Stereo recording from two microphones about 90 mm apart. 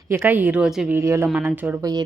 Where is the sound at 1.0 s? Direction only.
30° right (ahead or behind).